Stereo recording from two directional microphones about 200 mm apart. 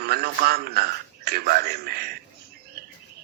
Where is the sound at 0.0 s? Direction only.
50° right (ahead or behind).